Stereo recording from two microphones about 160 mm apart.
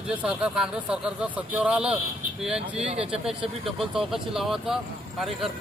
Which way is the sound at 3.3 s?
5° right (ahead or behind).